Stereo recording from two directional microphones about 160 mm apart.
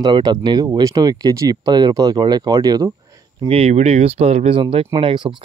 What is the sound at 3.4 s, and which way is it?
Speech, 40° right (ahead or behind).